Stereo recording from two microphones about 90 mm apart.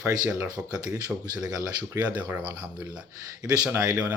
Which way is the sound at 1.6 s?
45° right (ahead or behind).